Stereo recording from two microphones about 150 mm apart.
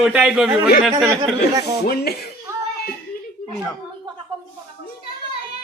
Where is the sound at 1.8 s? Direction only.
90° left.